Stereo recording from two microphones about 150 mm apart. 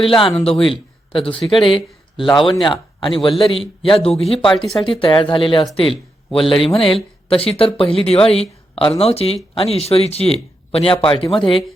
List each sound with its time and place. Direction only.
0.0 s speech: 35° left (ahead or behind)
4.4 s speech: centre (ahead or behind)
4.8 s speech: 35° left (ahead or behind)
6.4 s speech: centre (ahead or behind)
6.7 s speech: 35° left (ahead or behind)